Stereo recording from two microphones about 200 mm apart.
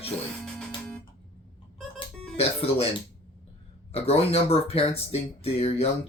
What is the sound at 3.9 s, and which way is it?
Speech, 30° left (ahead or behind).